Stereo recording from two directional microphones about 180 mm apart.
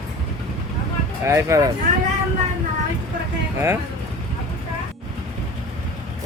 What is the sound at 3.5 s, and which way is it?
Speech, 15° right (ahead or behind).